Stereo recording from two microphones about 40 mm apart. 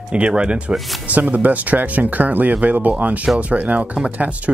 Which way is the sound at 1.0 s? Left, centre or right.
Right.